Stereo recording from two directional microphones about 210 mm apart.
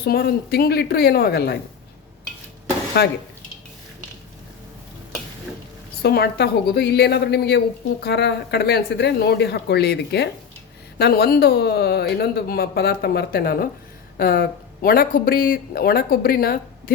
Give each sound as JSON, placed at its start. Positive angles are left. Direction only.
{"t": 0.0, "sound": "speech", "side_deg": 50}
{"t": 3.0, "sound": "speech", "side_deg": 50}
{"t": 6.0, "sound": "speech", "side_deg": 50}